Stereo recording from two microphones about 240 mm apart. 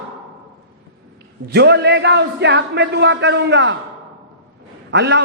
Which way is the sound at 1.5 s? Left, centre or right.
Right.